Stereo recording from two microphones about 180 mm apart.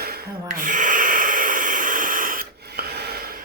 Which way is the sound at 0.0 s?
55° right (ahead or behind).